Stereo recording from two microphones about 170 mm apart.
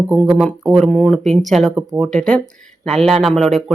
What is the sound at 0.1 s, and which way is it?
Speech, 5° right (ahead or behind).